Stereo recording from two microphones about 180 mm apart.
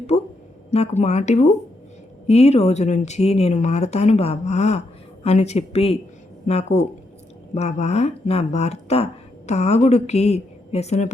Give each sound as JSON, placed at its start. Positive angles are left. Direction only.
{"t": 0.7, "sound": "speech", "side_deg": 35}